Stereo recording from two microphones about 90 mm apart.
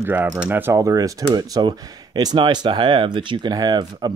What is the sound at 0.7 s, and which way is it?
Speech, 40° right (ahead or behind).